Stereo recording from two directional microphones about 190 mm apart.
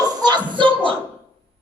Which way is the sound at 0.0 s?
20° right (ahead or behind).